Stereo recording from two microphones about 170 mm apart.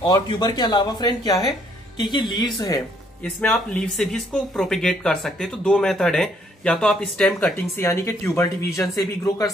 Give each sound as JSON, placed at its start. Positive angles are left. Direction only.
{"t": 0.0, "sound": "speech", "side_deg": 25}
{"t": 3.3, "sound": "speech", "side_deg": 5}
{"t": 7.7, "sound": "speech", "side_deg": 15}